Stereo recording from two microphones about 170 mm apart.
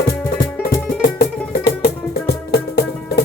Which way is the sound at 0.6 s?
60° left (ahead or behind).